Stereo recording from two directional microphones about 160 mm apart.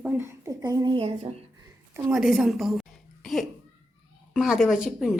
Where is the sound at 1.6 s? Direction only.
20° right (ahead or behind).